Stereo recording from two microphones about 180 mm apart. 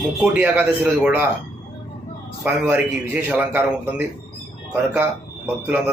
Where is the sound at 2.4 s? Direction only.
5° right (ahead or behind).